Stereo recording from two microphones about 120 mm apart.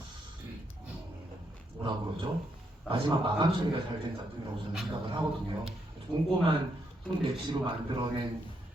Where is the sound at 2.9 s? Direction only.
45° right (ahead or behind).